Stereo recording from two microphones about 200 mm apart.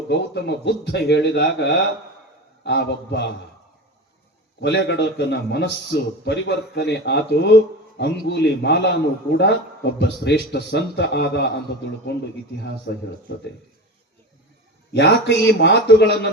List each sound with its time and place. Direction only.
0.1 s a man's voice: 55° left (ahead or behind)
4.6 s a man's voice: 60° left (ahead or behind)
12.6 s a man's voice: 55° left (ahead or behind)
14.9 s a man's voice: 60° left (ahead or behind)